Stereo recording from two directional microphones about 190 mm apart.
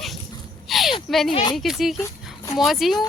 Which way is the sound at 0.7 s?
Centre (ahead or behind).